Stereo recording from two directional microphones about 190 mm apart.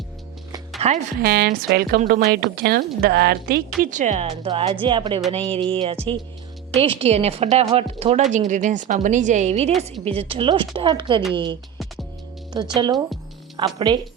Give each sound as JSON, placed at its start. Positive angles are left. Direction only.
{"t": 0.8, "sound": "speech", "side_deg": -30}
{"t": 1.2, "sound": "speech", "side_deg": -55}
{"t": 3.8, "sound": "speech", "side_deg": -40}
{"t": 12.5, "sound": "speech", "side_deg": -20}